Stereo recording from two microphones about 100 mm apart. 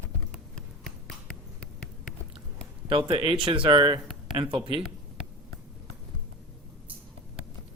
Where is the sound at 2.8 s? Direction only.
60° right (ahead or behind).